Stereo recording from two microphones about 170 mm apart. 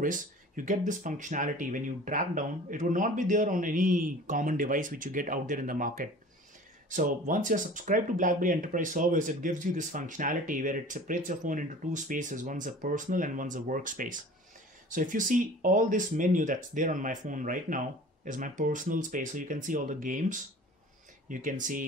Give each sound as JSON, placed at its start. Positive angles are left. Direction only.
{"t": 0.0, "sound": "speech", "side_deg": -50}